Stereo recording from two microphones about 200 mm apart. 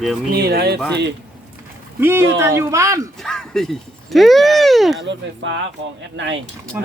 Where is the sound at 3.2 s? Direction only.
5° left (ahead or behind).